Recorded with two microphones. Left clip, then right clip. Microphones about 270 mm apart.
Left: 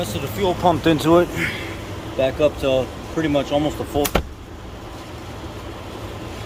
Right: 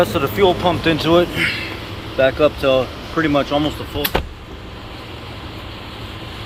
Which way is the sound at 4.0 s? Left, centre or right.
Left.